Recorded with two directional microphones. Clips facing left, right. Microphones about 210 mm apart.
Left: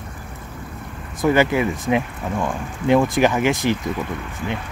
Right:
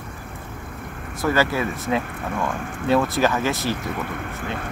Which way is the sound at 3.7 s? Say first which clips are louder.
Left 3 dB; 55° right (ahead or behind).